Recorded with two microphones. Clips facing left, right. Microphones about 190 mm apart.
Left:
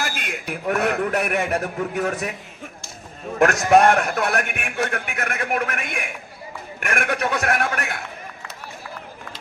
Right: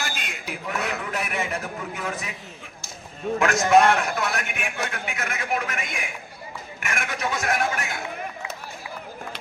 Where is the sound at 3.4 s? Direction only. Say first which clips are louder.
Left 3 dB; 50° left (ahead or behind).